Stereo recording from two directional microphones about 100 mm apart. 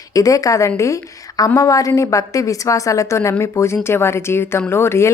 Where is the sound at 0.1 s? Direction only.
35° left (ahead or behind).